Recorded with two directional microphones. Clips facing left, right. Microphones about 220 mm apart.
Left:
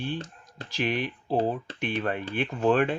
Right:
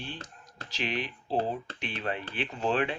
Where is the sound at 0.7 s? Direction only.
50° left (ahead or behind).